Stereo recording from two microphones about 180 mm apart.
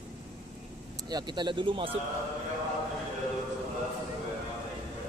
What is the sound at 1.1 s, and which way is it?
Speech, 25° right (ahead or behind).